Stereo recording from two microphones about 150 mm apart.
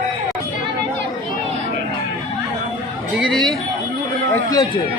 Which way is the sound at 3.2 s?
Centre (ahead or behind).